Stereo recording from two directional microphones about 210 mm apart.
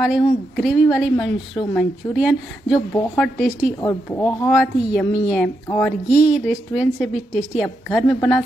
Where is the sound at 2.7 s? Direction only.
15° left (ahead or behind).